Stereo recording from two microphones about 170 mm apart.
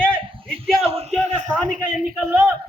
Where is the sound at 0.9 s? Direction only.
40° right (ahead or behind).